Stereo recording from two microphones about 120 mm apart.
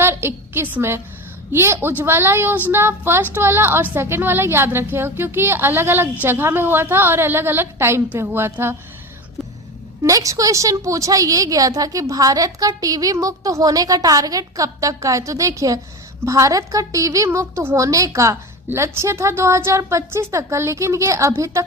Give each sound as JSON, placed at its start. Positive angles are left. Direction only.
{"t": 0.0, "sound": "a woman's voice", "side_deg": -20}
{"t": 10.0, "sound": "a woman's voice", "side_deg": -30}